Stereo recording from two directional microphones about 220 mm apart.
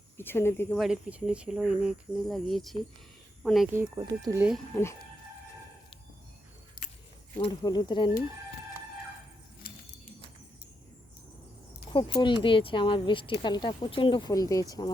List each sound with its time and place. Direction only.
0.2 s speech: 10° left (ahead or behind)
0.8 s speech: 5° right (ahead or behind)
6.8 s keys jangling: 40° left (ahead or behind)
7.3 s speech: 20° left (ahead or behind)
9.6 s keys jangling: 40° left (ahead or behind)
11.9 s speech: 20° left (ahead or behind)